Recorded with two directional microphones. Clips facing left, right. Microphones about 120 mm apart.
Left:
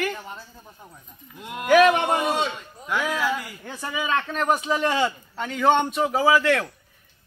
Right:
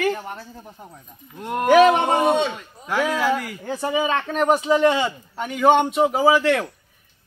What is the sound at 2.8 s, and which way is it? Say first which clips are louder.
Speech: right 4 dB; 40° right (ahead or behind).